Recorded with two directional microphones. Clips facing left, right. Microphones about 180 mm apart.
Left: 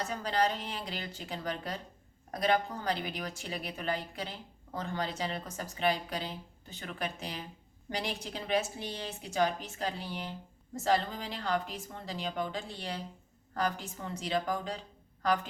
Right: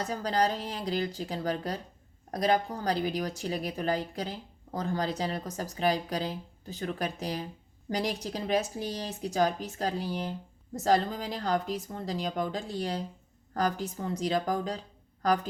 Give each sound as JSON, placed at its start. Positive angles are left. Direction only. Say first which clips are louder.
{"t": 0.0, "sound": "speech", "louder": "right 3 dB", "side_deg": -35}